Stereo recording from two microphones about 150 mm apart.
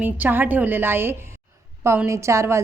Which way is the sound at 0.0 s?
10° right (ahead or behind).